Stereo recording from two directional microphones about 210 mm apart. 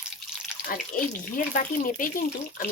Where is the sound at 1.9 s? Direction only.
40° left (ahead or behind).